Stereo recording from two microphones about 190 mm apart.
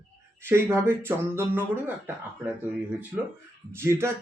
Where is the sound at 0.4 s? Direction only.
15° right (ahead or behind).